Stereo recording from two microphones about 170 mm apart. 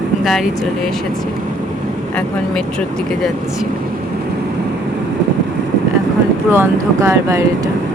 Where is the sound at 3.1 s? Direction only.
Centre (ahead or behind).